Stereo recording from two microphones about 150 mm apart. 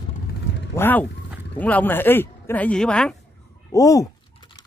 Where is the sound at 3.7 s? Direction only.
20° left (ahead or behind).